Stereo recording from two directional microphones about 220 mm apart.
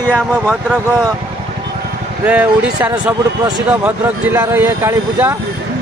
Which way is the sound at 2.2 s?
5° right (ahead or behind).